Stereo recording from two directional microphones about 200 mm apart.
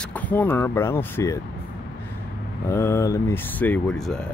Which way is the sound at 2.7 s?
15° left (ahead or behind).